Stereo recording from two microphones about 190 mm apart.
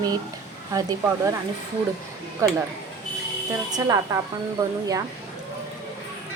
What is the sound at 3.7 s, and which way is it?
Speech, 20° right (ahead or behind).